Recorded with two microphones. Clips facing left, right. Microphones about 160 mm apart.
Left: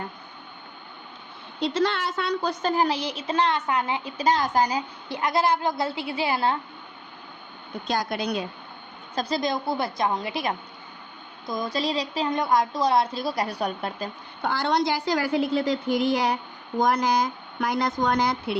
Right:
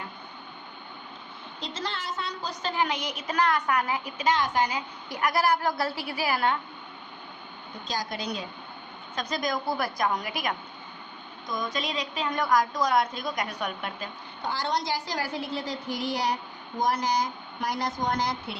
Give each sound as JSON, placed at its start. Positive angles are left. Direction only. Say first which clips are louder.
{"t": 1.6, "sound": "a woman's voice", "louder": "left 10 dB", "side_deg": 70}
{"t": 5.1, "sound": "a woman's voice", "louder": "left 2 dB", "side_deg": 25}
{"t": 7.9, "sound": "a woman's voice", "louder": "left 6 dB", "side_deg": 60}
{"t": 9.1, "sound": "a woman's voice", "louder": "left 4 dB", "side_deg": 30}
{"t": 14.4, "sound": "a woman's voice", "louder": "left 6 dB", "side_deg": 60}